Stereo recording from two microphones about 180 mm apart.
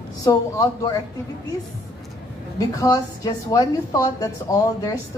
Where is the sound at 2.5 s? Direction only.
20° left (ahead or behind).